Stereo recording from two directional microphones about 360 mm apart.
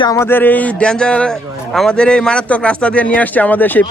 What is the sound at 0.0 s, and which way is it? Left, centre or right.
A man's voice, centre.